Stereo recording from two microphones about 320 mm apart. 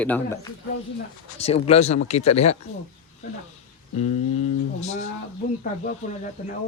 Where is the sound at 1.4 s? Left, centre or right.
Centre.